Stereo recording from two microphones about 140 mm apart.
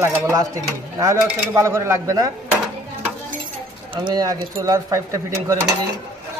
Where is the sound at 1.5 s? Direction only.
20° right (ahead or behind).